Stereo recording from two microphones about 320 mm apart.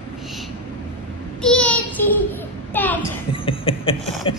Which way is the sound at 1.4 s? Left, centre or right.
Centre.